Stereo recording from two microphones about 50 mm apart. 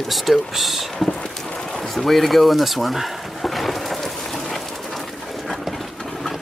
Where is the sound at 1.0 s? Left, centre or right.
Centre.